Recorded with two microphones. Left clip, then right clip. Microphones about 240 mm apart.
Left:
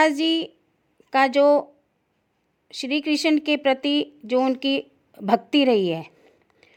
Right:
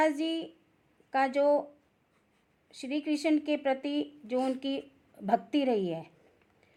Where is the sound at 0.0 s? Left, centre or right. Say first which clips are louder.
Left 9 dB; left.